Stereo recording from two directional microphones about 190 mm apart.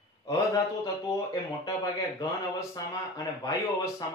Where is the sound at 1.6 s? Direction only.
20° left (ahead or behind).